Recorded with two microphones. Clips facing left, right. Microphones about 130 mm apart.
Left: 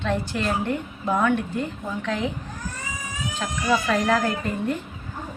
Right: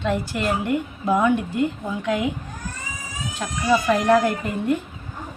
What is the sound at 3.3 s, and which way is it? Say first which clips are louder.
Speech: right 3 dB; 10° right (ahead or behind).